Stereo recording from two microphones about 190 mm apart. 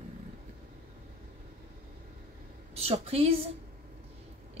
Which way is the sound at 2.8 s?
30° right (ahead or behind).